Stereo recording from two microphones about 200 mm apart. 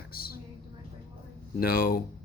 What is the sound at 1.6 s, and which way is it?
Speech, 50° left (ahead or behind).